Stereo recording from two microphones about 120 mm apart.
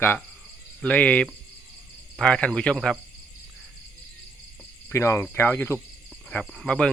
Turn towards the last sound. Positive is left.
turn(degrees=5)  # may be behind; listen again after turning